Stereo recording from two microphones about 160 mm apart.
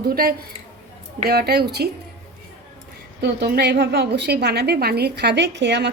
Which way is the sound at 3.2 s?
90° right.